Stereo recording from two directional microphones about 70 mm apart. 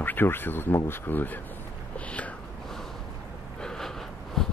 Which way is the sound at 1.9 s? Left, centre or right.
Centre.